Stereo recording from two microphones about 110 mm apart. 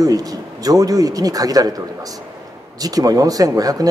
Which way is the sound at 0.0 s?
35° right (ahead or behind).